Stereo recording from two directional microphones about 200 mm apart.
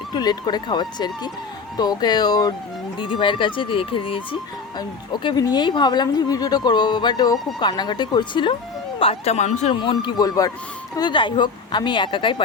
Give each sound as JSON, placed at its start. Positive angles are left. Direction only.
{"t": 0.1, "sound": "speech", "side_deg": 20}
{"t": 9.7, "sound": "speech", "side_deg": 25}